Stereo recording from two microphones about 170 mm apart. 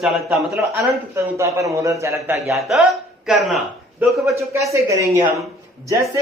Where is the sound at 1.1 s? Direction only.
15° right (ahead or behind).